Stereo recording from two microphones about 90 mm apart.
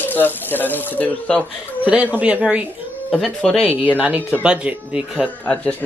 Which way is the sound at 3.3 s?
10° left (ahead or behind).